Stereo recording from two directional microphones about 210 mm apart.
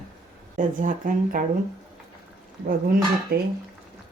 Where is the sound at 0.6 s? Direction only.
40° right (ahead or behind).